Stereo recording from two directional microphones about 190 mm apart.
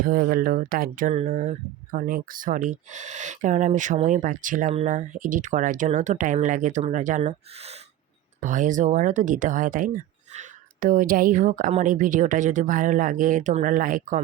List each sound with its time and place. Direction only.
0.0 s speech: 50° right (ahead or behind)